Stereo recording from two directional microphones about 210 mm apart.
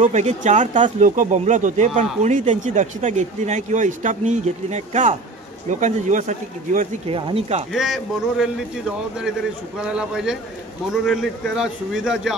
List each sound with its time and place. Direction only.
0.0 s speech: 35° right (ahead or behind)
7.1 s speech: 25° right (ahead or behind)
7.7 s speech: centre (ahead or behind)